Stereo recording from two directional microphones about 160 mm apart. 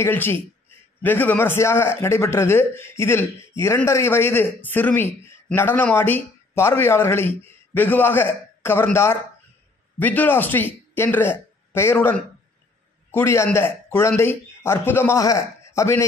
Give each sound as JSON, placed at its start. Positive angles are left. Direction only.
{"t": 0.0, "sound": "a man's voice", "side_deg": 15}